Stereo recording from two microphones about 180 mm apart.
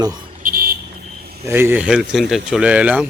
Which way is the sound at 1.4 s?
10° right (ahead or behind).